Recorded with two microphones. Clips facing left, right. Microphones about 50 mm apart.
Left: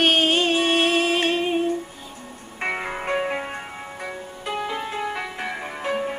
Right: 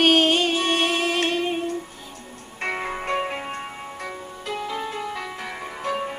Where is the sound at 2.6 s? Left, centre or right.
Centre.